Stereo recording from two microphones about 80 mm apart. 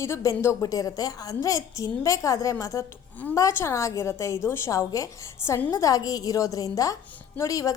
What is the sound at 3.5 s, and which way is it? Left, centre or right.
A woman's voice, left.